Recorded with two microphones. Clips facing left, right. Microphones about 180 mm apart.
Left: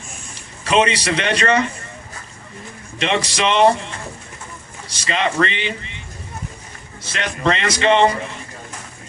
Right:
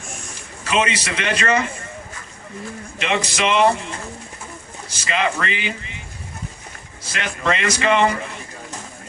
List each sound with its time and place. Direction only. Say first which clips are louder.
0.6 s speech: left 4 dB; 35° left (ahead or behind)
3.0 s speech: left 2 dB; 35° left (ahead or behind)
4.9 s speech: left 1 dB; 35° left (ahead or behind)
7.1 s speech: left 2 dB; 35° left (ahead or behind)